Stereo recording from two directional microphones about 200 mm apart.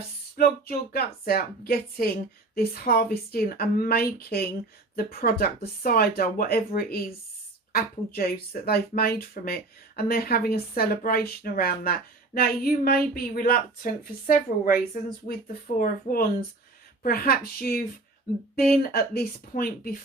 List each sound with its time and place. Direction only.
0.3 s speech: 50° left (ahead or behind)